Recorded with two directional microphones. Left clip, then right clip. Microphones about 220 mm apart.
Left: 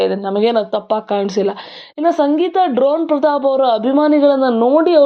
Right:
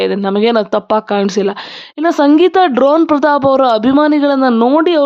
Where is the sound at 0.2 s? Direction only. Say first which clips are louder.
Right 3 dB; 25° right (ahead or behind).